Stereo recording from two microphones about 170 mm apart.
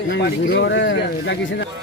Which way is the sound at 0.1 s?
90° left.